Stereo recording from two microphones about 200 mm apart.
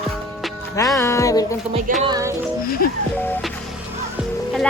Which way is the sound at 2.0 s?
15° right (ahead or behind).